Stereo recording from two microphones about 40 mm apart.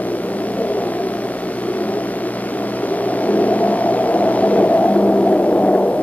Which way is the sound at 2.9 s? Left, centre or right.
Left.